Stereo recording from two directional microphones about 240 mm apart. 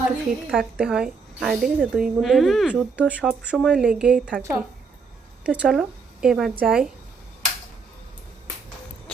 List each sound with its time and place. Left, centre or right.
0.5 s a woman's voice: centre